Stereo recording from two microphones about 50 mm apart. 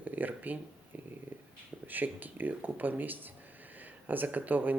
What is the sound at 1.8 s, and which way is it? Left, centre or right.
Speech, right.